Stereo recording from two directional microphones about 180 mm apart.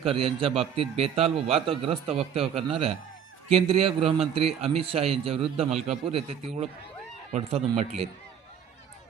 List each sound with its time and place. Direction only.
0.0 s a man's voice: 30° right (ahead or behind)